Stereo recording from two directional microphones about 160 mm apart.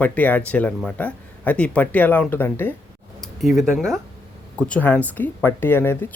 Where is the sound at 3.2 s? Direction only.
Centre (ahead or behind).